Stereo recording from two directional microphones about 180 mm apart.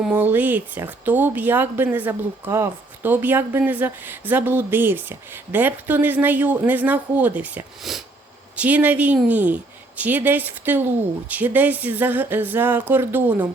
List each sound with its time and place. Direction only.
0.0 s speech: 5° right (ahead or behind)